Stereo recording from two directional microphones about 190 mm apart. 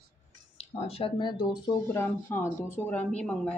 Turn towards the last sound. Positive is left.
turn(degrees=5)  # may be behind; listen again after turning